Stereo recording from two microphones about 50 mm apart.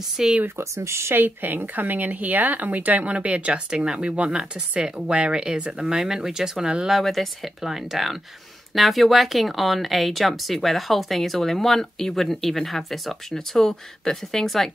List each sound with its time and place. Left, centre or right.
0.2 s speech: centre
0.6 s speech: right
1.1 s speech: right; by 6.9 s centre
6.9 s speech: centre